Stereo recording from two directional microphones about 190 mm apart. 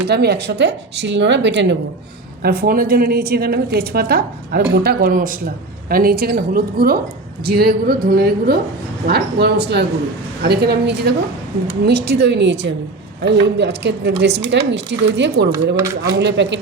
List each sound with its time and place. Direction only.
0.1 s speech: 60° right (ahead or behind)
2.4 s a woman's voice: 55° right (ahead or behind)
15.8 s speech: 15° right (ahead or behind)
16.1 s speech: 65° right (ahead or behind)